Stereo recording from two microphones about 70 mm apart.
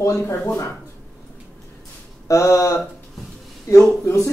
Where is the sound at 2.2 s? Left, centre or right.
Left.